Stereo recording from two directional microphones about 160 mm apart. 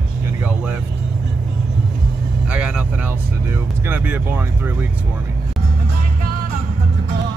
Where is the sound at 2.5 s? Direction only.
5° right (ahead or behind).